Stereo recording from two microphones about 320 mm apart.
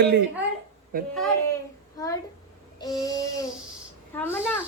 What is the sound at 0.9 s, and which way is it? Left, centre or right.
Speech, right.